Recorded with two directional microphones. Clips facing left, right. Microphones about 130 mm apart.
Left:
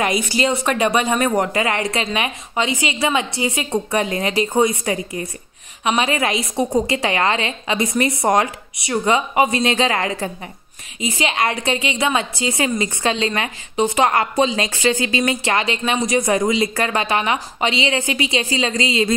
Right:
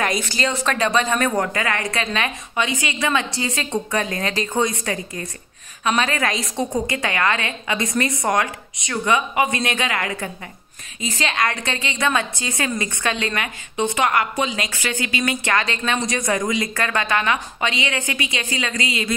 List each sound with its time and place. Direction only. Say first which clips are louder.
0.0 s speech: left 3 dB; 5° left (ahead or behind)
0.3 s speech: left 4 dB; 20° left (ahead or behind)
1.5 s speech: left 4 dB; 25° left (ahead or behind)
11.0 s a woman's voice: left 2 dB; 15° left (ahead or behind)